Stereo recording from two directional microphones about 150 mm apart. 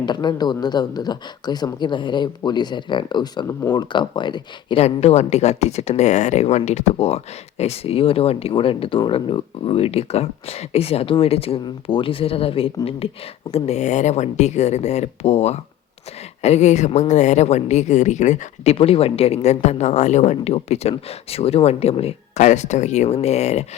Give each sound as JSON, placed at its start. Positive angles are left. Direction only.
{"t": 0.0, "sound": "speech", "side_deg": 30}
{"t": 4.8, "sound": "a woman's voice", "side_deg": 45}